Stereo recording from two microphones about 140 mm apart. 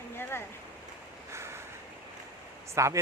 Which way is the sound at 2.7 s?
20° right (ahead or behind).